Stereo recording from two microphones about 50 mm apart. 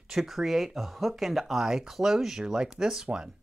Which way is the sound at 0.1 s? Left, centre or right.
Centre.